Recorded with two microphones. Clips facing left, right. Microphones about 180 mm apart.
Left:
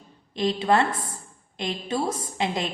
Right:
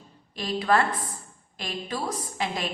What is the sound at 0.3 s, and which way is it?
A woman's voice, 25° left (ahead or behind).